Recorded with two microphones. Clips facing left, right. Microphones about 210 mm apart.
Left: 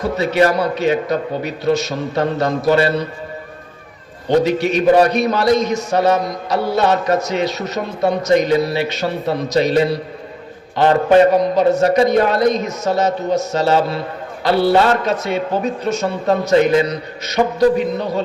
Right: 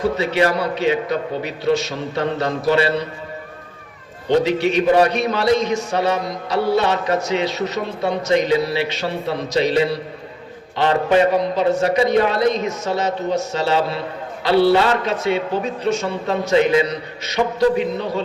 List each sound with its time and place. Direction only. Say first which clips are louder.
0.0 s a man's voice: left 2 dB; 40° left (ahead or behind)
4.3 s a man's voice: left 2 dB; 45° left (ahead or behind)